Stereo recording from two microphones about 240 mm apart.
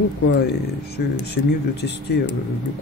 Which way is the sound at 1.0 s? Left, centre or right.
Left.